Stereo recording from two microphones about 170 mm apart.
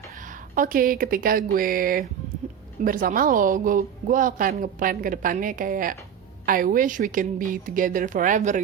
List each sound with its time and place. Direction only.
0.5 s a woman's voice: 55° right (ahead or behind)